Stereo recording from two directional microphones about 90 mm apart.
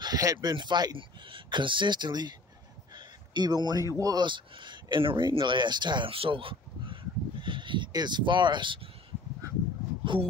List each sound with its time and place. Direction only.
0.0 s speech: 45° right (ahead or behind)
0.9 s speech: 65° right (ahead or behind)
3.3 s speech: 50° right (ahead or behind)
4.3 s speech: 60° right (ahead or behind)
10.1 s speech: 65° right (ahead or behind)